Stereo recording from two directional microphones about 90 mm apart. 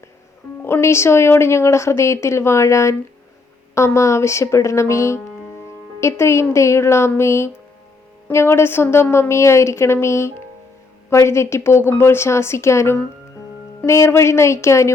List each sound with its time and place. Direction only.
0.6 s a woman's voice: 30° left (ahead or behind)